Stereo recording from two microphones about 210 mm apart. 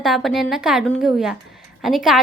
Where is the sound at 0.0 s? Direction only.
Centre (ahead or behind).